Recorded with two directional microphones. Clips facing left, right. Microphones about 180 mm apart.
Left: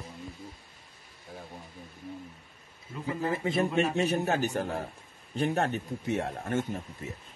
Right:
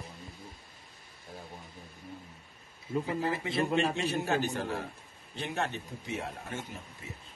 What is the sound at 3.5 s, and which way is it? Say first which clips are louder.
A man's voice: left 2 dB; 45° left (ahead or behind).